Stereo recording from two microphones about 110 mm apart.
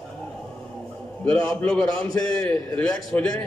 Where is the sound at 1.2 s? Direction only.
10° left (ahead or behind).